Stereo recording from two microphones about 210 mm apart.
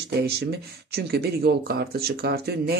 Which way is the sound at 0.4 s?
50° right (ahead or behind).